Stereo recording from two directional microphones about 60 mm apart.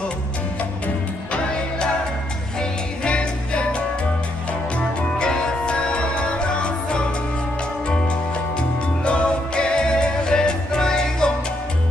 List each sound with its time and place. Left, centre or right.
0.8 s music: centre